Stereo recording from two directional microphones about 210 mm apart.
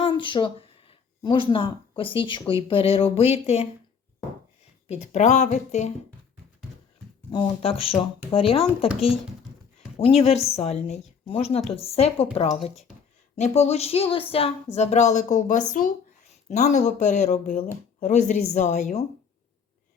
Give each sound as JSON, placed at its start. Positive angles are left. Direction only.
{"t": 0.0, "sound": "speech", "side_deg": 25}
{"t": 4.9, "sound": "speech", "side_deg": 30}
{"t": 7.3, "sound": "speech", "side_deg": 25}
{"t": 10.0, "sound": "speech", "side_deg": 30}